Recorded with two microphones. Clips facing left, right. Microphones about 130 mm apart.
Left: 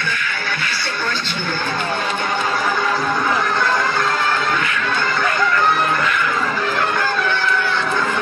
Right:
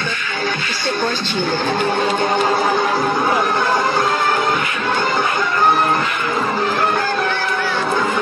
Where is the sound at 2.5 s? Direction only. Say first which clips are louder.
Right 3 dB; 30° right (ahead or behind).